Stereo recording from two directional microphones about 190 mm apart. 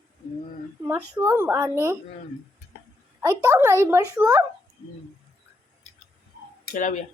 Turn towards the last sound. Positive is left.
turn(degrees=45)  # may be behind; listen again after turning